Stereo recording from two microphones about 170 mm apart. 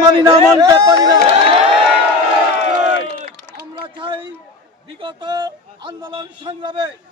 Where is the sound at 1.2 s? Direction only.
30° right (ahead or behind).